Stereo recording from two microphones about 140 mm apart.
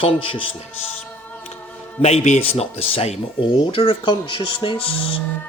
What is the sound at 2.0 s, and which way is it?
A man's voice, 55° left (ahead or behind).